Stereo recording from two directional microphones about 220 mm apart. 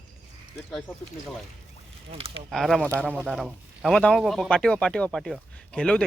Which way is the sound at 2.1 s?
25° right (ahead or behind).